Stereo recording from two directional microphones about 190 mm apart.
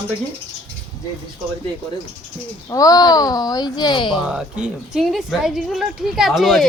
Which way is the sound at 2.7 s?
20° left (ahead or behind).